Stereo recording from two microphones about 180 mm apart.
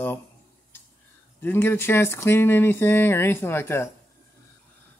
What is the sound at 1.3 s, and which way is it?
Speech, 10° left (ahead or behind).